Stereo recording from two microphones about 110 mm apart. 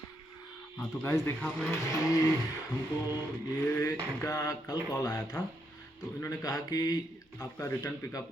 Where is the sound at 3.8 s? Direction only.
30° left (ahead or behind).